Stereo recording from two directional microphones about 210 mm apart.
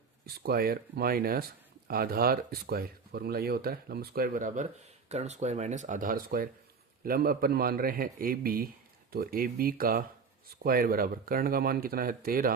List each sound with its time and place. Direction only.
0.3 s speech: 45° right (ahead or behind)